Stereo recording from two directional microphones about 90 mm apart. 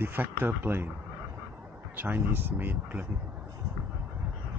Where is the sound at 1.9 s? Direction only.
20° right (ahead or behind).